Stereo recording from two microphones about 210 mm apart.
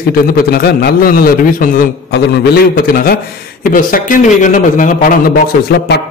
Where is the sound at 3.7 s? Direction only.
40° left (ahead or behind).